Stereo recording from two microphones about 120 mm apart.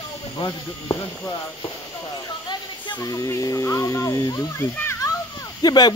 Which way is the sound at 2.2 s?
40° left (ahead or behind).